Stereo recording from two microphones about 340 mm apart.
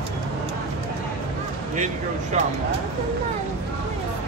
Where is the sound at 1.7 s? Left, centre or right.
Right.